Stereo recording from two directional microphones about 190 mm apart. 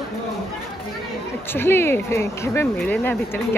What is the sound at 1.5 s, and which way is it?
Speech, 10° left (ahead or behind).